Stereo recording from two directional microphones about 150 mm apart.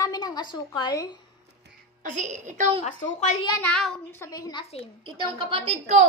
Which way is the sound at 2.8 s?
50° left (ahead or behind).